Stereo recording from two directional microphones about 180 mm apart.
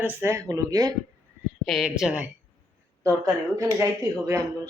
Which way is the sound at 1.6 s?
Centre (ahead or behind).